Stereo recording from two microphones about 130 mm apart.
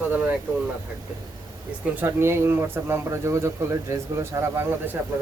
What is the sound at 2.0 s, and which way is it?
Speech, 20° right (ahead or behind).